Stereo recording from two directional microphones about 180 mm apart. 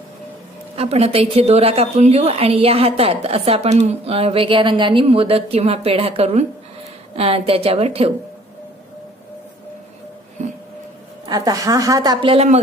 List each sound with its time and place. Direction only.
0.7 s a woman's voice: 35° right (ahead or behind)
11.2 s a woman's voice: 20° right (ahead or behind)